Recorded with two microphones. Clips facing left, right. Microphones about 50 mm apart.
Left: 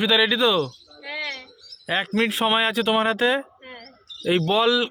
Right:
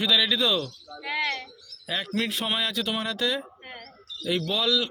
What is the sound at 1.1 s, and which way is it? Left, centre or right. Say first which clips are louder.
Speech: right 3 dB; right.